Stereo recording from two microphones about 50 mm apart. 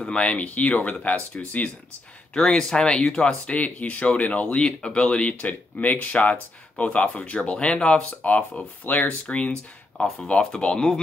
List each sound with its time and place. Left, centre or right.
0.0 s speech: left
2.3 s speech: centre; by 9.1 s left
9.2 s speech: left